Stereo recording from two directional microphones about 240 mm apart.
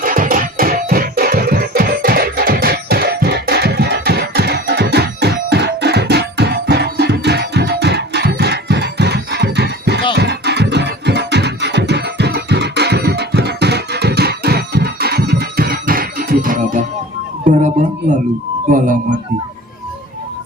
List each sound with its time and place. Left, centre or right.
0.0 s music: right